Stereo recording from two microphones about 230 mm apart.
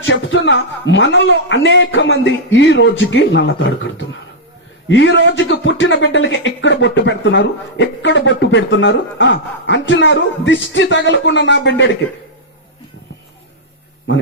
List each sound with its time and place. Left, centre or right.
0.0 s speech: left